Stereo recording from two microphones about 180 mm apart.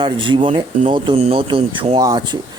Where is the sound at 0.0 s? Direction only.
25° right (ahead or behind).